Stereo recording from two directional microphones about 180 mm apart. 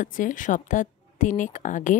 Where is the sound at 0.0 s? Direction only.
45° left (ahead or behind).